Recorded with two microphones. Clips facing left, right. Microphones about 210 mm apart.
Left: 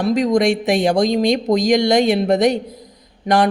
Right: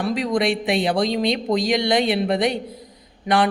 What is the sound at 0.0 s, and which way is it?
A man's voice, 40° left (ahead or behind).